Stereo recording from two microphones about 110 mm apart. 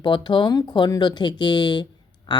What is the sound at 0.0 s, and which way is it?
Speech, 45° left (ahead or behind).